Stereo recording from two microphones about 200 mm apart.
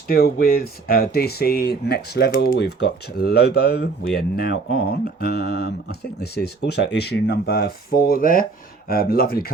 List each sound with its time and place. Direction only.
0.1 s speech: 50° left (ahead or behind)